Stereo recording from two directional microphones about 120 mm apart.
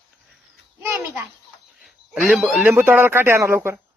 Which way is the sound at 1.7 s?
5° right (ahead or behind).